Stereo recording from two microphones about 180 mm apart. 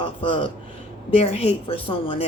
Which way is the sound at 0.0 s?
30° left (ahead or behind).